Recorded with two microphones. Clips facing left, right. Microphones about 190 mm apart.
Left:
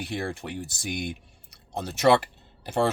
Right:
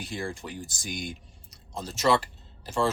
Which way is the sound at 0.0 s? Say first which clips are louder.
Left 3 dB; 65° left (ahead or behind).